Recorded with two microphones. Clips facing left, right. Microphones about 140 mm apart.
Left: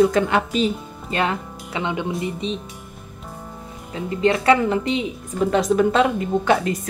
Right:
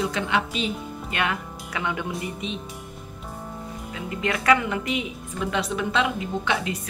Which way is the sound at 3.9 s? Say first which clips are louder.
Left 8 dB; 30° left (ahead or behind).